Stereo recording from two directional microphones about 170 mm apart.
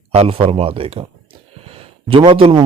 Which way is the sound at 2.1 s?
30° right (ahead or behind).